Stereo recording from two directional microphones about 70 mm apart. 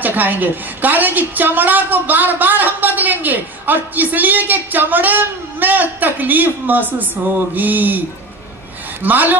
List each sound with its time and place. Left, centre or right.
0.0 s a woman's voice: right
9.0 s a woman's voice: right